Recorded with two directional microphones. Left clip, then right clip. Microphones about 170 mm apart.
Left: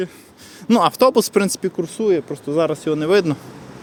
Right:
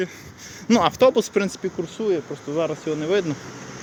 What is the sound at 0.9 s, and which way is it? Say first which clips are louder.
Speech: left 3 dB; 45° left (ahead or behind).